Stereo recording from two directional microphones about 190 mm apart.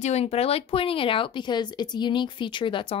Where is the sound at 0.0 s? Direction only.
35° left (ahead or behind).